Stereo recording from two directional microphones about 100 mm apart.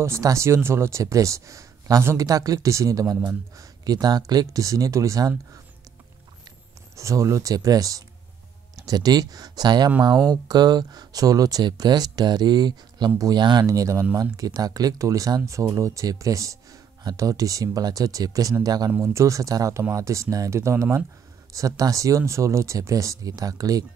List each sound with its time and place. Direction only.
0.0 s speech: 30° right (ahead or behind)
7.0 s speech: 30° right (ahead or behind)
18.9 s speech: 30° right (ahead or behind)